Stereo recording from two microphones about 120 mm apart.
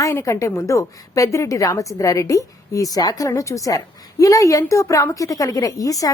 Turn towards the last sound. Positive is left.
turn(degrees=30)  # may be behind; listen again after turning